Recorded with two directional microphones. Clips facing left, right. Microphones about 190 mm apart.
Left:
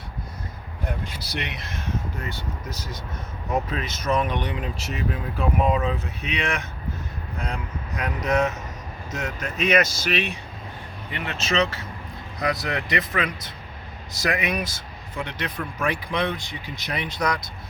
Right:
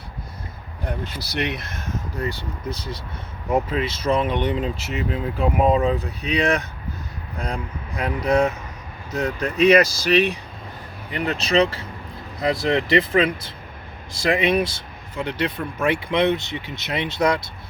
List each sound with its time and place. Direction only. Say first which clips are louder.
1.2 s speech: right 6 dB; 65° right (ahead or behind); by 17.5 s 25° right (ahead or behind)